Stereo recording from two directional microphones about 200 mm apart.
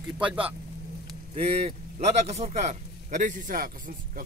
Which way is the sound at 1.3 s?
30° right (ahead or behind).